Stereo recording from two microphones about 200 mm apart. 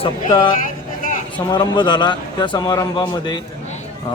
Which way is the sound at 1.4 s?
20° left (ahead or behind).